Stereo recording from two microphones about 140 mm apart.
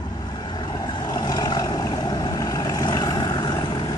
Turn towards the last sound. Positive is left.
turn(degrees=30)  # may be behind; listen again after turning